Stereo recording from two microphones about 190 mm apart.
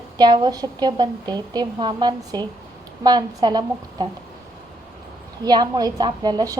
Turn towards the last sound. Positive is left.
turn(degrees=-20)  # may be behind; listen again after turning